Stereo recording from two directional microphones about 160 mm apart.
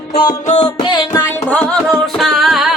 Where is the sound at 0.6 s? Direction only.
25° left (ahead or behind).